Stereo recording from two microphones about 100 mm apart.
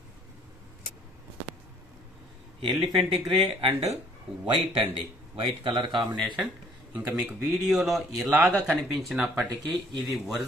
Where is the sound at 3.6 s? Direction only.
75° right (ahead or behind).